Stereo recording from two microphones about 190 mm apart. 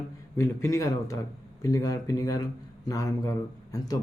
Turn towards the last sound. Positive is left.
turn(degrees=20)  # may be behind; listen again after turning